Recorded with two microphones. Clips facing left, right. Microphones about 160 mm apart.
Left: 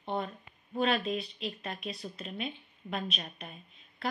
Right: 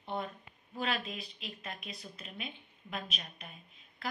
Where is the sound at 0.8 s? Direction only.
30° left (ahead or behind).